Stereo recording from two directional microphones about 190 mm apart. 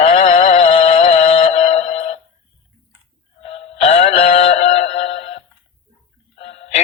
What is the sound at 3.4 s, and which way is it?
Music, 30° left (ahead or behind).